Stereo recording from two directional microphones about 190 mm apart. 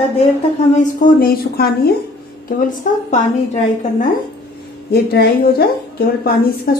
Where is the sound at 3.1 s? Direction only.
40° left (ahead or behind).